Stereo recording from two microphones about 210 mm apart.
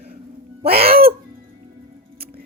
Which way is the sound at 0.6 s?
45° right (ahead or behind).